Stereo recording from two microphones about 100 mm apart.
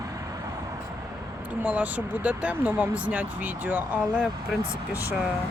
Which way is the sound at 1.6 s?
15° right (ahead or behind).